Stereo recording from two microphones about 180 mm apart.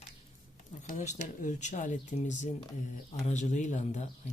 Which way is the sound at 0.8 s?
40° left (ahead or behind).